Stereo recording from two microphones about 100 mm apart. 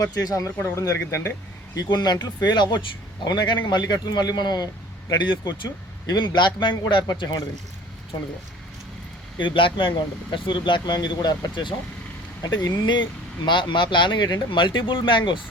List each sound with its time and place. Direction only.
0.0 s speech: 40° left (ahead or behind)
1.8 s a man's voice: 45° left (ahead or behind)
9.4 s a man's voice: 55° left (ahead or behind)